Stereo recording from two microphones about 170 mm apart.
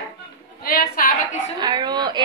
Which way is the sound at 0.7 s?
60° left (ahead or behind).